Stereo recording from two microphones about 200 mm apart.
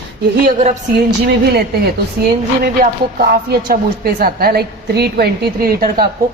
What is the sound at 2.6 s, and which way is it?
A woman's voice, 50° right (ahead or behind).